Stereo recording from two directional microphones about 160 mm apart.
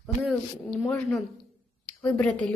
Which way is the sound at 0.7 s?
5° left (ahead or behind).